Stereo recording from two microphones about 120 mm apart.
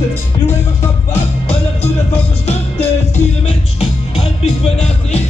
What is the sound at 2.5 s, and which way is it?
Music, 60° left (ahead or behind).